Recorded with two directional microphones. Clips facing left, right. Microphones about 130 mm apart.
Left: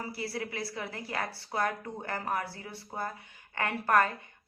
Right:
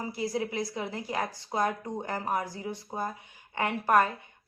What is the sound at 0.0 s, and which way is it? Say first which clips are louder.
A woman's voice: right 5 dB; 15° right (ahead or behind).